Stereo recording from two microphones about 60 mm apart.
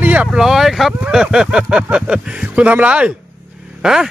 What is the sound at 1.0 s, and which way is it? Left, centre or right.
Speech, centre.